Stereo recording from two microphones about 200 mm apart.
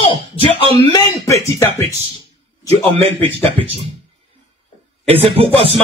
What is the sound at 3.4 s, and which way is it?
Speech, 30° right (ahead or behind).